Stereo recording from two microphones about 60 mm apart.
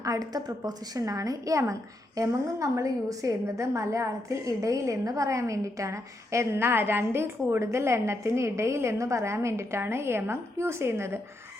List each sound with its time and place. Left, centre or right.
0.0 s a woman's voice: right